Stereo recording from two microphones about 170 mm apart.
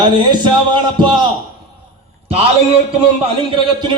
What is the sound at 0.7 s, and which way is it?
Speech, 25° right (ahead or behind).